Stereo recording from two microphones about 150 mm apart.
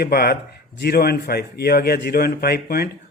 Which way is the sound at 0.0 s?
90° left.